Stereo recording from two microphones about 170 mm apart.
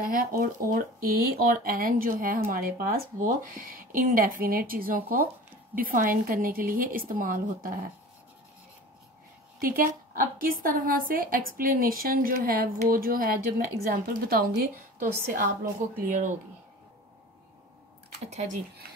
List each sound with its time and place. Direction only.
0.0 s speech: 55° right (ahead or behind)
9.6 s speech: 55° right (ahead or behind)
16.0 s speech: 50° right (ahead or behind)
18.3 s speech: 40° right (ahead or behind)